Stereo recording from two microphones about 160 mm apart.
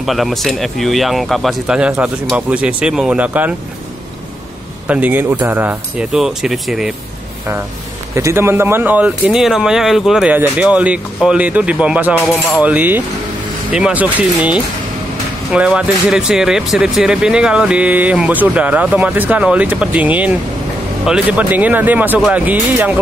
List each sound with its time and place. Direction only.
0.0 s speech: centre (ahead or behind)
4.8 s speech: 10° right (ahead or behind)
8.1 s speech: 15° right (ahead or behind)